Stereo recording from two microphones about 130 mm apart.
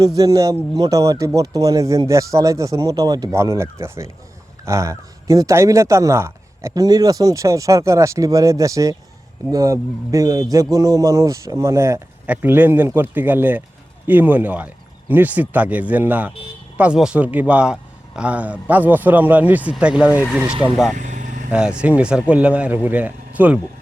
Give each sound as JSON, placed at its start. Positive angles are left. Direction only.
{"t": 0.2, "sound": "speech", "side_deg": -25}
{"t": 20.9, "sound": "vehicle", "side_deg": -70}
{"t": 21.5, "sound": "speech", "side_deg": -5}